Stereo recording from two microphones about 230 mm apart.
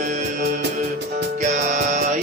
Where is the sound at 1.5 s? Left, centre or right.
Right.